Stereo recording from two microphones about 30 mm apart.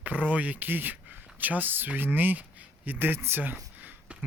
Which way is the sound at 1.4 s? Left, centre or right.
Right.